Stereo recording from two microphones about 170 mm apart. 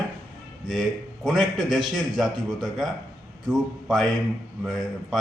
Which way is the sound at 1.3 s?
Centre (ahead or behind).